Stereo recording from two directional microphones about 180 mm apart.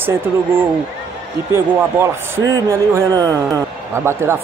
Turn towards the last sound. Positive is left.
turn(degrees=-15)  # may be behind; listen again after turning